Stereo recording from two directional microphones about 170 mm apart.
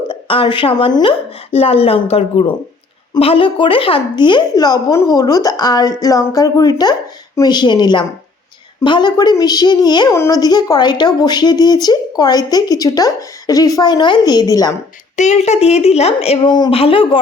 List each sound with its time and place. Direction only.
0.1 s a woman's voice: 30° left (ahead or behind)
15.1 s a woman's voice: 45° left (ahead or behind)